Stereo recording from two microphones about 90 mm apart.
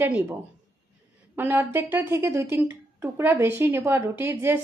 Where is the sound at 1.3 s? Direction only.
25° right (ahead or behind).